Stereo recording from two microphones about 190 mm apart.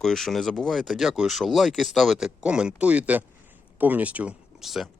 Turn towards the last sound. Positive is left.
turn(degrees=0)  # may be behind; listen again after turning